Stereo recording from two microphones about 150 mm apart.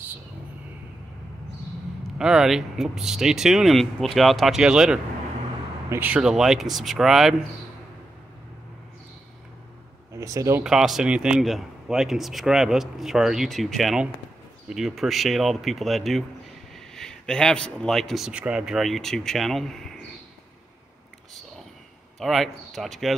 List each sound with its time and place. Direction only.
2.1 s a man's voice: 5° right (ahead or behind)
10.1 s speech: 20° right (ahead or behind)
10.6 s a man's voice: 5° right (ahead or behind)
22.2 s a man's voice: centre (ahead or behind)